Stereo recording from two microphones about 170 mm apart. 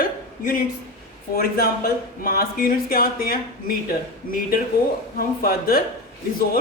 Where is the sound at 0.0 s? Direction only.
55° left (ahead or behind).